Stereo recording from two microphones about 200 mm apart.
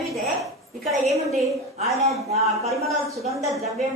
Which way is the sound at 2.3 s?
30° right (ahead or behind).